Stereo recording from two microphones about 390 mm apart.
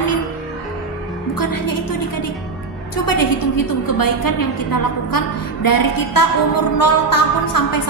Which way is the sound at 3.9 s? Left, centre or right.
Left.